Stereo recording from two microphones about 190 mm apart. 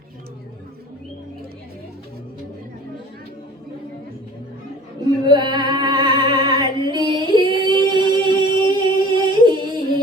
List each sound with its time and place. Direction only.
5.2 s female singing: 25° right (ahead or behind)
7.3 s singing: 25° right (ahead or behind)